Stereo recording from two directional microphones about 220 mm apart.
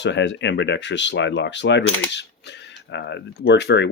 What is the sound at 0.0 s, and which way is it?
Speech, 55° left (ahead or behind).